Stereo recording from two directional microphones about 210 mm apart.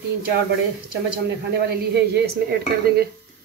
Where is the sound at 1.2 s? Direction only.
50° right (ahead or behind).